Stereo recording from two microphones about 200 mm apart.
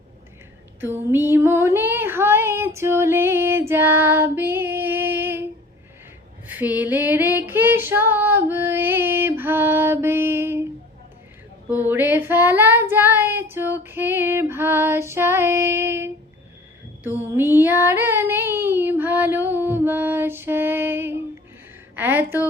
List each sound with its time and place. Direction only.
0.8 s female singing: 10° right (ahead or behind)
6.5 s female singing: 10° right (ahead or behind)
11.7 s child singing: 10° right (ahead or behind)
17.2 s child singing: 10° right (ahead or behind)